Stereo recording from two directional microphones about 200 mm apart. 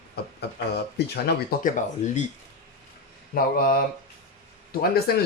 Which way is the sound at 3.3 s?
45° left (ahead or behind).